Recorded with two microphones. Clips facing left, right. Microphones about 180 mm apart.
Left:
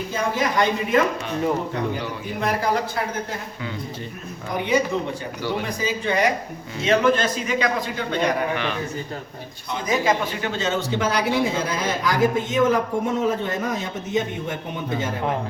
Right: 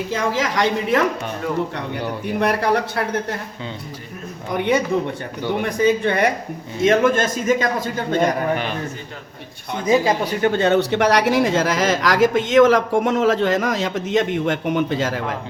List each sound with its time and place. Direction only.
0.1 s speech: 90° right
2.4 s speech: 65° right (ahead or behind)
4.5 s a man's voice: 60° right (ahead or behind); by 8.6 s 45° right (ahead or behind)
10.4 s speech: 55° right (ahead or behind); by 15.4 s 90° right